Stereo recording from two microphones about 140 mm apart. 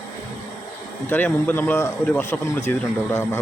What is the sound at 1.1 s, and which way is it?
Speech, 10° left (ahead or behind).